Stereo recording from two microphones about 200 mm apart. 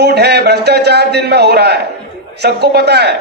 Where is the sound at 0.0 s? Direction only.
55° right (ahead or behind).